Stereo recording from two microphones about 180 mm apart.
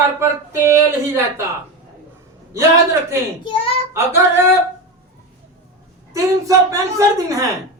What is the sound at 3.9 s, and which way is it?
Speech, 15° right (ahead or behind).